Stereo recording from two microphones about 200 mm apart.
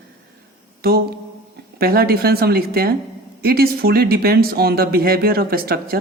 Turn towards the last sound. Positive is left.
turn(degrees=-50)  # may be behind; listen again after turning